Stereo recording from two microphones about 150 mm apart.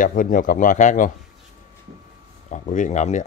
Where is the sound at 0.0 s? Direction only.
65° left (ahead or behind).